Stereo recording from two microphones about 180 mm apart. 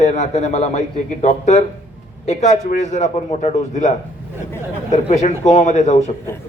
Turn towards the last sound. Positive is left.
turn(degrees=40)  # may be behind; listen again after turning